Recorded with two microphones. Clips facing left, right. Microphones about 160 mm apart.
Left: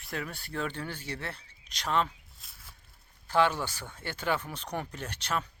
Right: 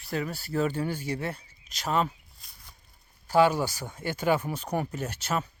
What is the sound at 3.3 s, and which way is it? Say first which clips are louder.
Speech: right 5 dB; 10° right (ahead or behind).